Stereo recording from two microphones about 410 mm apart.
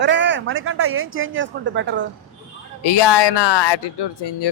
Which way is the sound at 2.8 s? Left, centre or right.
Left.